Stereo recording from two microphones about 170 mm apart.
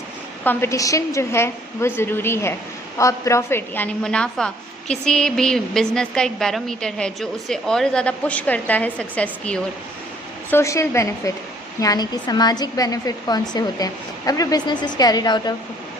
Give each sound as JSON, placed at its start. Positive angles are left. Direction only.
{"t": 0.4, "sound": "a woman's voice", "side_deg": 15}